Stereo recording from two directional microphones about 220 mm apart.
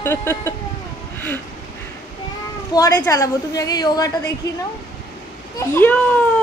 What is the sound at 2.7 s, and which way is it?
A woman's voice, 15° left (ahead or behind).